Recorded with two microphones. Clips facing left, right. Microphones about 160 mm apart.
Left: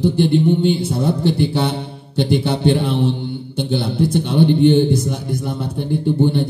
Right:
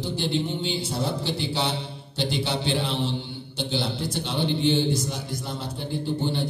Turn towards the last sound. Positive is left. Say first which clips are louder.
# left 10 dB
turn(degrees=55)  # may be behind; listen again after turning